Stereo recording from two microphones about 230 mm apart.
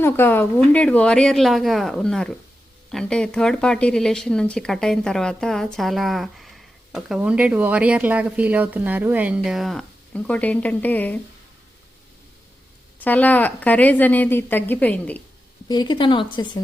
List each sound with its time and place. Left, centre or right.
0.0 s speech: centre
13.1 s a woman's voice: centre
15.7 s speech: centre